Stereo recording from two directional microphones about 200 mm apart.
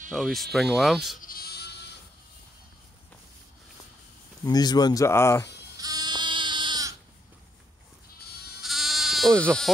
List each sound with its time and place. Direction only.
0.1 s speech: centre (ahead or behind)
1.2 s sheep: 50° left (ahead or behind)
4.5 s speech: 20° left (ahead or behind)
5.8 s sheep: 20° right (ahead or behind)
8.5 s sheep: centre (ahead or behind)